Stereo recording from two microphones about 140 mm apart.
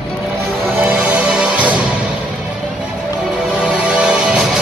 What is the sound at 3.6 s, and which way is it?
Music, 5° right (ahead or behind).